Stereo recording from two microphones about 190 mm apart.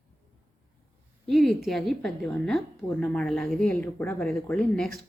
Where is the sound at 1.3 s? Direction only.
Centre (ahead or behind).